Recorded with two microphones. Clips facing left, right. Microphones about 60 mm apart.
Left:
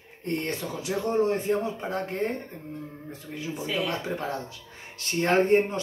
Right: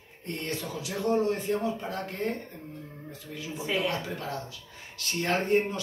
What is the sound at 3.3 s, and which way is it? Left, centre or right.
Speech, left.